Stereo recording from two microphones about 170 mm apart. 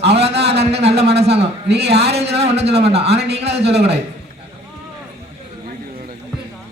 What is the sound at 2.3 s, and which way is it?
A man's voice, 40° right (ahead or behind).